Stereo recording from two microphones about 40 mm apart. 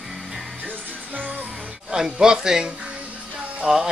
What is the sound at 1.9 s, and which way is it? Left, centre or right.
A man's voice, centre.